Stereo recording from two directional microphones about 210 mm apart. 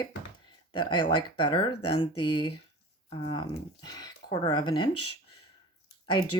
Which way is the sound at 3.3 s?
20° left (ahead or behind).